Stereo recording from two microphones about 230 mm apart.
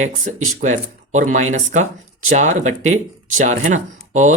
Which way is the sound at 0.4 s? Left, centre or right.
Right.